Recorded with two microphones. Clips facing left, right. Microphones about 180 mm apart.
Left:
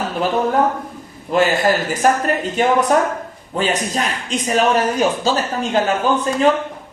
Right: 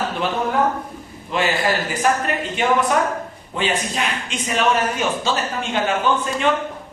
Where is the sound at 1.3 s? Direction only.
45° left (ahead or behind).